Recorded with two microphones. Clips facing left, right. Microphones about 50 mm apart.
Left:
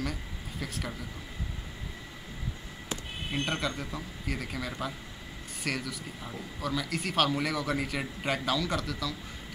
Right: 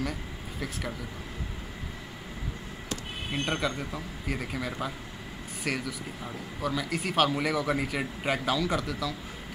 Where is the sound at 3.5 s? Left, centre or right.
Centre.